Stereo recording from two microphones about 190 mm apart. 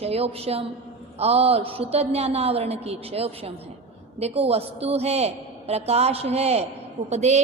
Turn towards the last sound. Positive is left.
turn(degrees=-35)  # may be behind; listen again after turning